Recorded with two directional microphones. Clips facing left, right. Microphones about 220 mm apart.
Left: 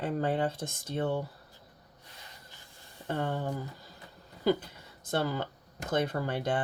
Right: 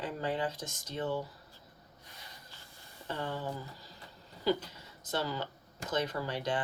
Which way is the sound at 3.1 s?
50° left (ahead or behind).